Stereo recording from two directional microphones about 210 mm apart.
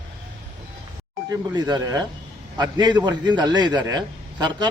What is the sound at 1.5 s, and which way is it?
A man's voice, 20° right (ahead or behind).